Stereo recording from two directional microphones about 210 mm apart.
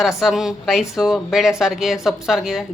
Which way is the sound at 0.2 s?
Centre (ahead or behind).